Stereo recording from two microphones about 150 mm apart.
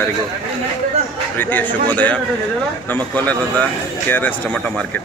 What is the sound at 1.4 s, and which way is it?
Speech, 10° left (ahead or behind).